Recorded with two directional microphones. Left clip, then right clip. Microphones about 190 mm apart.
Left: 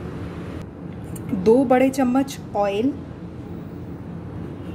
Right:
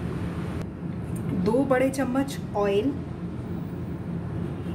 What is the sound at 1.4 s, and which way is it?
A woman's voice, 50° left (ahead or behind).